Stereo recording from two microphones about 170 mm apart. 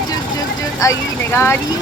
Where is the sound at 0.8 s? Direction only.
15° left (ahead or behind).